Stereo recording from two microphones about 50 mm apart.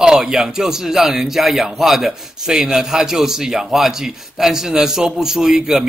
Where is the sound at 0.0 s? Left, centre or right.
Centre.